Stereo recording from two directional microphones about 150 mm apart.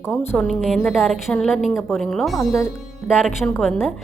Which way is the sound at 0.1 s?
15° left (ahead or behind).